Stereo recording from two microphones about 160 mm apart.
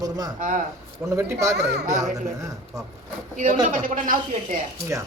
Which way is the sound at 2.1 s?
20° right (ahead or behind).